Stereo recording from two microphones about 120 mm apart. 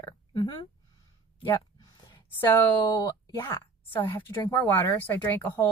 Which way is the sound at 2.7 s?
40° left (ahead or behind).